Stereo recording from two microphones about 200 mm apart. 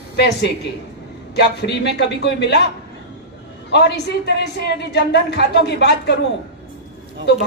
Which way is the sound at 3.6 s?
55° left (ahead or behind).